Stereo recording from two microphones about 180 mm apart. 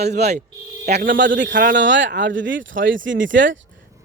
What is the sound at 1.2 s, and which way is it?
Speech, 80° right.